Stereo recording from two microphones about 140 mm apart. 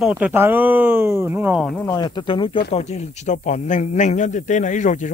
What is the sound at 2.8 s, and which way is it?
A man's voice, 55° left (ahead or behind).